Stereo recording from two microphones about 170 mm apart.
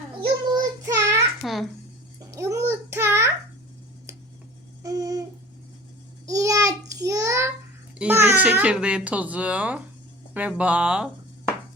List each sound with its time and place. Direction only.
0.6 s child singing: 20° right (ahead or behind)
1.4 s a child's voice: centre (ahead or behind)
2.3 s a sound: 15° right (ahead or behind)
4.8 s a sound: 20° right (ahead or behind)
6.2 s child singing: 20° right (ahead or behind)
7.9 s a child's voice: 10° right (ahead or behind)